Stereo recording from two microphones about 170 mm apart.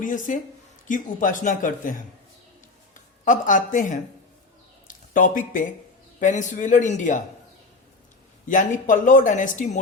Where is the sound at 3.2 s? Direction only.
50° left (ahead or behind).